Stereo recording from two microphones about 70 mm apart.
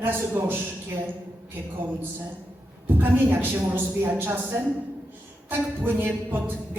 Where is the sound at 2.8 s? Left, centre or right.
Right.